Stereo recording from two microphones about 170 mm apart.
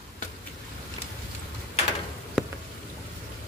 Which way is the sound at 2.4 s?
Centre (ahead or behind).